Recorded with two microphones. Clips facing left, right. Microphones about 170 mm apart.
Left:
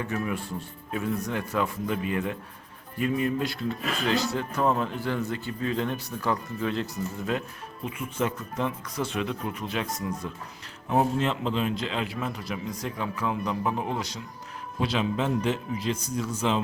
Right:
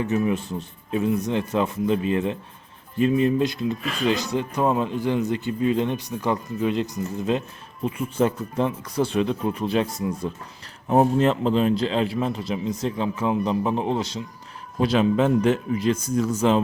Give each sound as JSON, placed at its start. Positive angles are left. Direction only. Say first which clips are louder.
{"t": 0.0, "sound": "a man's voice", "louder": "right 7 dB", "side_deg": -20}
{"t": 7.9, "sound": "speech", "louder": "right 7 dB", "side_deg": -35}
{"t": 10.9, "sound": "a man's voice", "louder": "right 6 dB", "side_deg": -40}
{"t": 14.8, "sound": "speech", "louder": "right 7 dB", "side_deg": -45}